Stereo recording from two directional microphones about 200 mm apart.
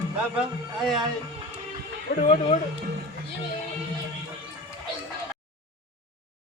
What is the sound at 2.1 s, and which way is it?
Speech, 50° left (ahead or behind).